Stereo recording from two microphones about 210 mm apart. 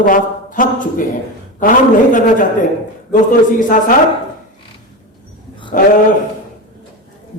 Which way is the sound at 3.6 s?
40° left (ahead or behind).